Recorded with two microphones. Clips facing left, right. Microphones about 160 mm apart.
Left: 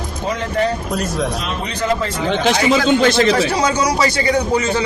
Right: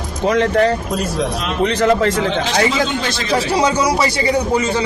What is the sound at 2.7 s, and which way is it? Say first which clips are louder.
Speech: left 6 dB; 55° left (ahead or behind).